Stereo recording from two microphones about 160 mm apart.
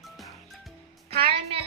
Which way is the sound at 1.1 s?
35° right (ahead or behind).